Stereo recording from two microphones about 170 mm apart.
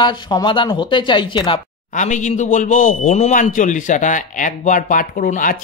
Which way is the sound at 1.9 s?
45° left (ahead or behind).